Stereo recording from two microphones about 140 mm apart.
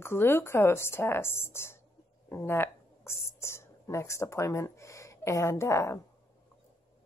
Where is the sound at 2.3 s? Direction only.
15° left (ahead or behind).